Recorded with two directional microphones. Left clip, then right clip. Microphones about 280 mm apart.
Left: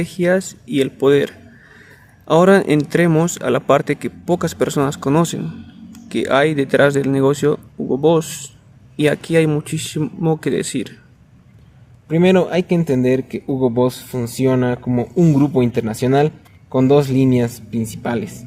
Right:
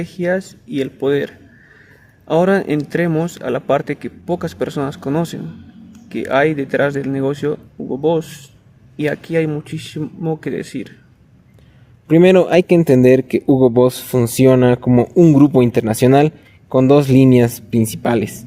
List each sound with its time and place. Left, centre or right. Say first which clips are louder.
0.0 s speech: left 2 dB; centre
12.0 s speech: right 4 dB; right